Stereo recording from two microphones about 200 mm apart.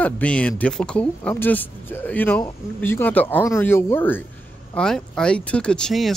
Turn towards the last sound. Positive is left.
turn(degrees=0)  # may be behind; listen again after turning